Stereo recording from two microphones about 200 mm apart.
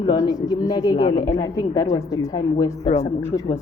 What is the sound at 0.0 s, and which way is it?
Speech, 20° left (ahead or behind).